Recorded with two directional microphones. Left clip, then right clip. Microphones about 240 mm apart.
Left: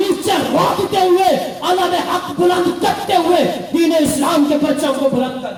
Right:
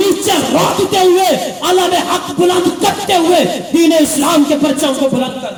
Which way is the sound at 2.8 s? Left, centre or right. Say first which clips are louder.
Right 3 dB; right.